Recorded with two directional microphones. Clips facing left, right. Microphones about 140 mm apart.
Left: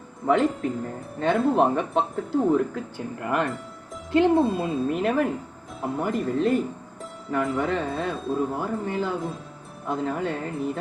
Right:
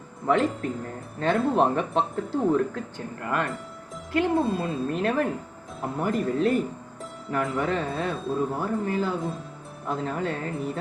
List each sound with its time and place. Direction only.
0.3 s speech: centre (ahead or behind)
3.2 s speech: 20° left (ahead or behind)
4.6 s speech: centre (ahead or behind)